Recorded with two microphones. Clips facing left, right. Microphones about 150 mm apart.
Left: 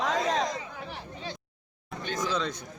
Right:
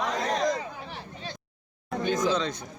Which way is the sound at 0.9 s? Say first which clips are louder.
Left 1 dB; 20° left (ahead or behind).